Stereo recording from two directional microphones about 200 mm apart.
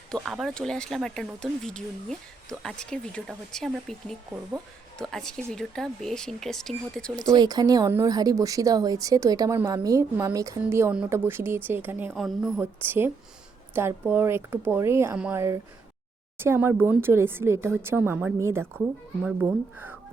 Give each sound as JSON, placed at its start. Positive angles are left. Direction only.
{"t": 0.1, "sound": "speech", "side_deg": 0}
{"t": 7.2, "sound": "speech", "side_deg": -20}
{"t": 12.5, "sound": "speech", "side_deg": -10}